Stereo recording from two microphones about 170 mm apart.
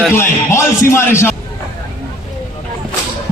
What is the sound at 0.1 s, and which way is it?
Speech, 15° left (ahead or behind).